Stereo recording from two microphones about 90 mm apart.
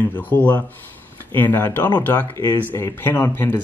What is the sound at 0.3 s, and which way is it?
Speech, 20° left (ahead or behind).